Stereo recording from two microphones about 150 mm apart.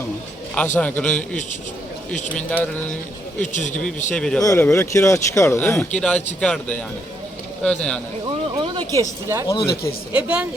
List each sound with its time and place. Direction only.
0.5 s a man's voice: 10° left (ahead or behind)
3.5 s a man's voice: 55° left (ahead or behind)
4.1 s speech: 5° left (ahead or behind)
4.4 s speech: 15° left (ahead or behind)
5.5 s a man's voice: 10° left (ahead or behind)
8.5 s a sound: 30° right (ahead or behind)
9.0 s speech: 20° right (ahead or behind)
9.5 s speech: 20° left (ahead or behind)
10.1 s a woman's voice: 10° right (ahead or behind)